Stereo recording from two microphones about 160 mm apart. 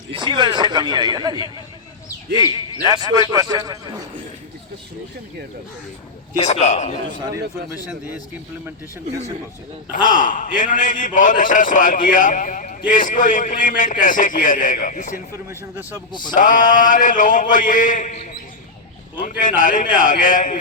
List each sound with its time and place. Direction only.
0.1 s a man's voice: 30° right (ahead or behind)
6.4 s a man's voice: 45° left (ahead or behind)
7.1 s a man's voice: 20° right (ahead or behind)
10.2 s a man's voice: 55° left (ahead or behind)
16.3 s a man's voice: 55° left (ahead or behind)
19.2 s a man's voice: 55° left (ahead or behind)